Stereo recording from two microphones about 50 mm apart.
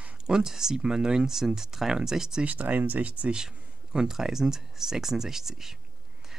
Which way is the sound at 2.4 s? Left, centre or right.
Right.